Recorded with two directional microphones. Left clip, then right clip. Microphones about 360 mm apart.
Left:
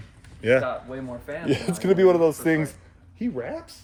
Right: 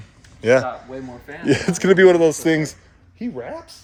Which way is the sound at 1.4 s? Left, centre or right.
Right.